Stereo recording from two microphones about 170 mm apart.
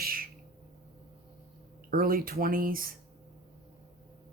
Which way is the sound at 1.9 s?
60° right (ahead or behind).